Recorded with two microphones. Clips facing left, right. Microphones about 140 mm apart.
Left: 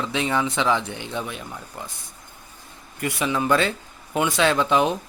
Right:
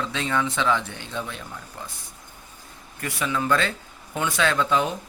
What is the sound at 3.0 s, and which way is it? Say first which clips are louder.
Speech: left 3 dB; 20° left (ahead or behind).